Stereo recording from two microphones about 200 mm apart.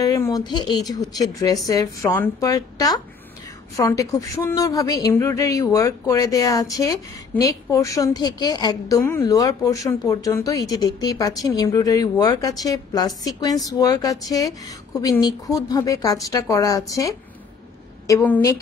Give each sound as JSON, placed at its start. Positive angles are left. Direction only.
{"t": 0.0, "sound": "a woman's voice", "side_deg": 15}